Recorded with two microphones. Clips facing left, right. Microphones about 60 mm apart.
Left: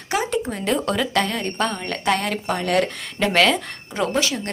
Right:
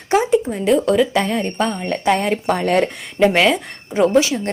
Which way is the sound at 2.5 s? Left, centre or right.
Right.